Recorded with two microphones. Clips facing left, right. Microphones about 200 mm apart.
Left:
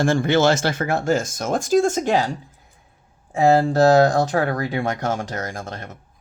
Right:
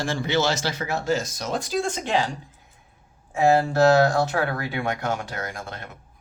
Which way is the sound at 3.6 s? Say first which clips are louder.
Left 3 dB; 35° left (ahead or behind).